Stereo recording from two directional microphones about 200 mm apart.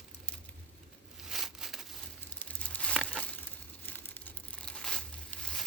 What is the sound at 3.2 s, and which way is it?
Crumpling, 10° left (ahead or behind).